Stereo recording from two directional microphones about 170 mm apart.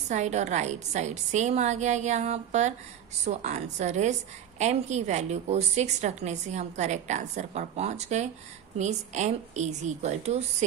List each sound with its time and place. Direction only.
0.1 s a woman's voice: 45° right (ahead or behind)